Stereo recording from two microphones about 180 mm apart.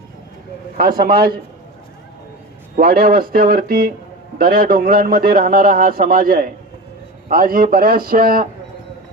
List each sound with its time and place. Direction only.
0.8 s speech: 55° right (ahead or behind)
2.7 s a man's voice: 55° right (ahead or behind)